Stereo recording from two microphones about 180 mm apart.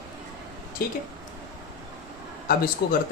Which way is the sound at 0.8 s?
55° left (ahead or behind).